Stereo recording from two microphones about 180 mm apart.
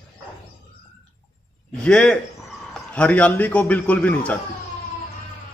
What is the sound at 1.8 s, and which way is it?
A man's voice, 5° left (ahead or behind).